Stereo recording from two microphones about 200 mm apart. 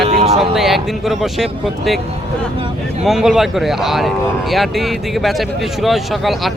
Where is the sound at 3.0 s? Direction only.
Centre (ahead or behind).